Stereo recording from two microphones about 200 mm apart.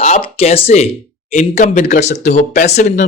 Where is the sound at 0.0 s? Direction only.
30° left (ahead or behind).